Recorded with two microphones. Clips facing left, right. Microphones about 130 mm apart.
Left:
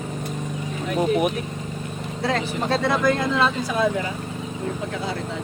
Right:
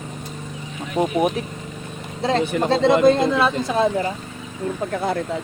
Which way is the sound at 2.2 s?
20° right (ahead or behind).